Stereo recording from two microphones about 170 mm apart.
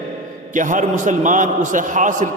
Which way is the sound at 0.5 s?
50° right (ahead or behind).